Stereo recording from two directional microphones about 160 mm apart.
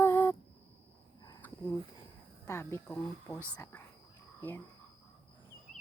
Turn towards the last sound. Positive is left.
turn(degrees=15)  # may be behind; listen again after turning